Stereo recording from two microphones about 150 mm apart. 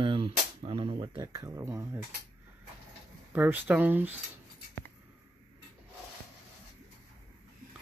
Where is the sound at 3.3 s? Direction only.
15° right (ahead or behind).